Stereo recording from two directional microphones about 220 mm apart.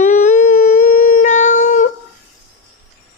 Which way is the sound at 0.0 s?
30° left (ahead or behind).